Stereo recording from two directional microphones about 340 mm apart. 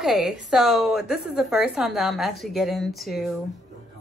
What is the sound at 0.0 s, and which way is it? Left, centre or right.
A woman's voice, centre.